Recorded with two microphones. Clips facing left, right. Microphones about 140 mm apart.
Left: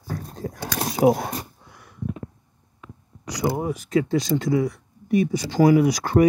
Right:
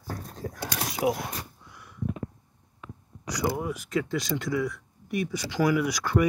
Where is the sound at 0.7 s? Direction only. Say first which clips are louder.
Left 9 dB; 35° left (ahead or behind).